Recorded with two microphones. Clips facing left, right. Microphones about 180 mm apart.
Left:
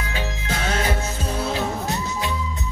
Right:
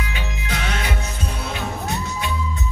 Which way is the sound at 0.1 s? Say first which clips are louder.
Left 2 dB; 35° left (ahead or behind).